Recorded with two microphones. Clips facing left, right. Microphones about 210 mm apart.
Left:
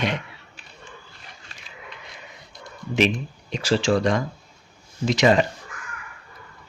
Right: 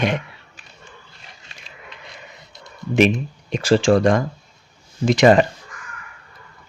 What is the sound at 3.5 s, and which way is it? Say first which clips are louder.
Speech: right 5 dB; 50° right (ahead or behind).